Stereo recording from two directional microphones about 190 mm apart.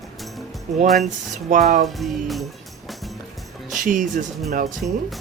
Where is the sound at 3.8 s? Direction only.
45° right (ahead or behind).